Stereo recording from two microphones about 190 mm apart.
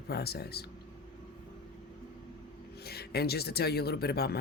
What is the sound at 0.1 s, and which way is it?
Speech, 55° left (ahead or behind).